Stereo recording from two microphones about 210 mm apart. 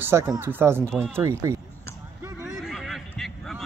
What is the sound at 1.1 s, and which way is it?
Speech, 10° right (ahead or behind).